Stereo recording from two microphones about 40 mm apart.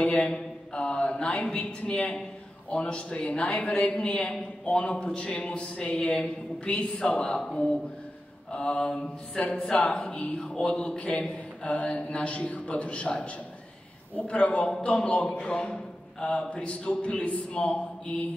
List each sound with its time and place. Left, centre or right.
0.0 s mantra: left
0.3 s a man's voice: left
14.1 s a man's voice: left
15.3 s a man's voice: left